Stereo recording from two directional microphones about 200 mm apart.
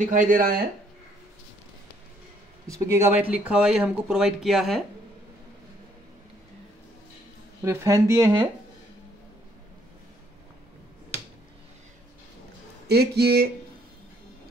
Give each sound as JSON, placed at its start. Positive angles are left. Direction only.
{"t": 0.0, "sound": "speech", "side_deg": -40}
{"t": 2.7, "sound": "speech", "side_deg": -15}
{"t": 7.6, "sound": "speech", "side_deg": -15}
{"t": 12.8, "sound": "speech", "side_deg": -55}